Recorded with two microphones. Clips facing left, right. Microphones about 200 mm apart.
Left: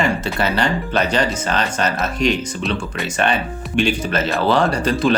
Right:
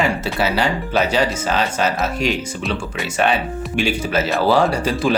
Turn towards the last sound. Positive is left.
turn(degrees=-10)  # may be behind; listen again after turning